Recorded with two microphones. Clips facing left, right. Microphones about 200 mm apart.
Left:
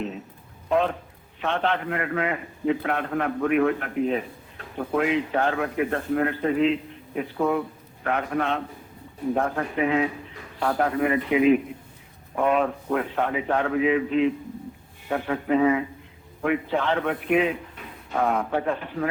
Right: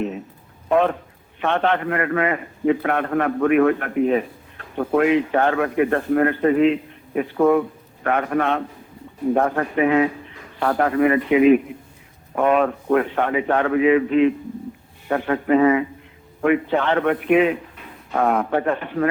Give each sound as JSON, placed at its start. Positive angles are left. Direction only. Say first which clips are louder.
{"t": 0.7, "sound": "a man's voice", "louder": "right 5 dB", "side_deg": -60}